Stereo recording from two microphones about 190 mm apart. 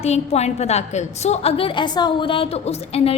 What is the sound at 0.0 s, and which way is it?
A woman's voice, 35° left (ahead or behind).